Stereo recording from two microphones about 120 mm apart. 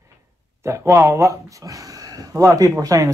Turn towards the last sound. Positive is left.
turn(degrees=-30)  # may be behind; listen again after turning